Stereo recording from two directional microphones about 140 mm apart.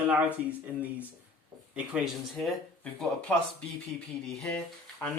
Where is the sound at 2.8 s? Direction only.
10° left (ahead or behind).